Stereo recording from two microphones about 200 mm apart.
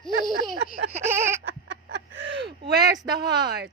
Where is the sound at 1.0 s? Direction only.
10° right (ahead or behind).